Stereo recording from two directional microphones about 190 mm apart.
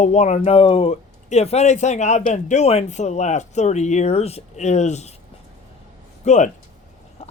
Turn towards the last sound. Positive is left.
turn(degrees=40)  # may be behind; listen again after turning